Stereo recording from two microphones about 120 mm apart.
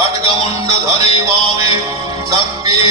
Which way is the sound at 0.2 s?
30° right (ahead or behind).